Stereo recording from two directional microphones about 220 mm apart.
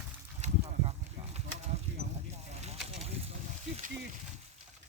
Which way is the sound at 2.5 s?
30° right (ahead or behind).